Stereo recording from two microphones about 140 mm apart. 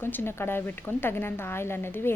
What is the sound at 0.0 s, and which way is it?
A woman's voice, 15° left (ahead or behind).